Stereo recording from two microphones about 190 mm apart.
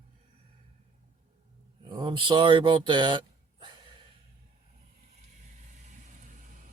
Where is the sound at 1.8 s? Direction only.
25° right (ahead or behind).